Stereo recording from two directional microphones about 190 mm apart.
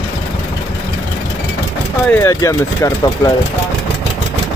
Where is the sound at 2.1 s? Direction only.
15° left (ahead or behind).